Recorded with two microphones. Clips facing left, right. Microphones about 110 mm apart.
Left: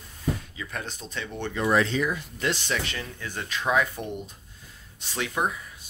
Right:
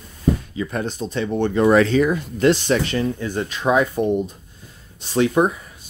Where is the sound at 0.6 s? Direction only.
35° right (ahead or behind).